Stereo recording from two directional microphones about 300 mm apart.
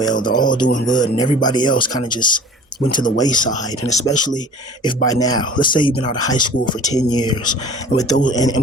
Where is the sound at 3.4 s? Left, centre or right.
Left.